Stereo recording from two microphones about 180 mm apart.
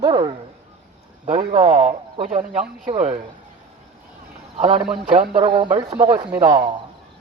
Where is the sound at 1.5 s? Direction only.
30° right (ahead or behind).